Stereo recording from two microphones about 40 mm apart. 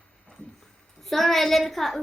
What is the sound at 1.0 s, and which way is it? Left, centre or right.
A woman's voice, centre.